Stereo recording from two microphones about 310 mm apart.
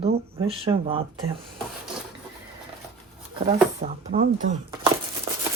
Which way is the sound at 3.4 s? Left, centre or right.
Right.